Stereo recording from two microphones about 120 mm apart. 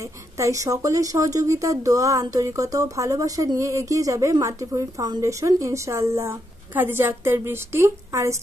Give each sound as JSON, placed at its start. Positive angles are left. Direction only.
{"t": 0.0, "sound": "speech", "side_deg": -25}